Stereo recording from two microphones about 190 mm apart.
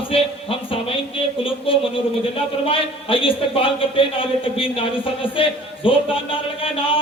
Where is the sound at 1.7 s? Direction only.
30° left (ahead or behind).